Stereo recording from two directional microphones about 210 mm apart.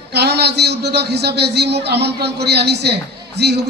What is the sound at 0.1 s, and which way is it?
A man's voice, 50° right (ahead or behind).